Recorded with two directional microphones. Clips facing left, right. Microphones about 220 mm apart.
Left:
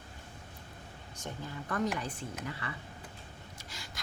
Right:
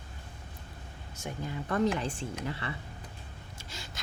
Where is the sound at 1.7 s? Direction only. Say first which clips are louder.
Right 5 dB; 30° right (ahead or behind).